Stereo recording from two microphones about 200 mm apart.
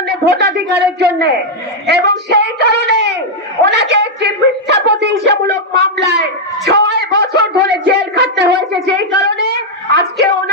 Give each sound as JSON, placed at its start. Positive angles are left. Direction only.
{"t": 0.1, "sound": "a woman's voice", "side_deg": -55}